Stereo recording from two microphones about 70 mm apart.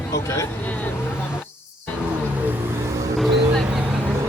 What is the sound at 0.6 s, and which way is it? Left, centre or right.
Speech, left.